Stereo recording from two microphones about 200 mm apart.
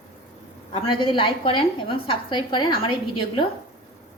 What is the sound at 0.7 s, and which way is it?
A woman's voice, 25° left (ahead or behind).